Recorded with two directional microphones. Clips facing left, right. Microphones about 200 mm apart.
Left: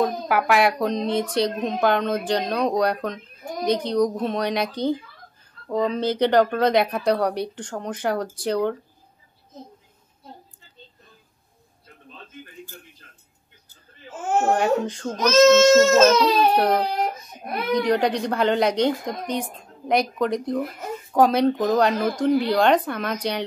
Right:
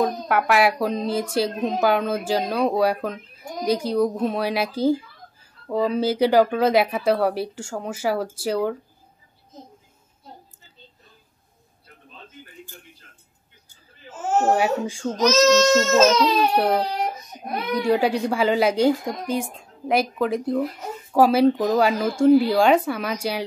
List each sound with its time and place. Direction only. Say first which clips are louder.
0.0 s speech: even; centre (ahead or behind)
14.4 s a woman's voice: left 1 dB; 5° right (ahead or behind)